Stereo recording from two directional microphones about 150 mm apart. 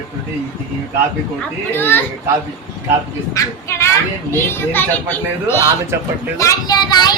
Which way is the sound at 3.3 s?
15° left (ahead or behind).